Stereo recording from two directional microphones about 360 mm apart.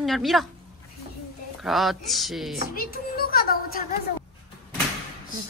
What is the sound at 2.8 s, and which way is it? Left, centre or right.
A woman's voice, left.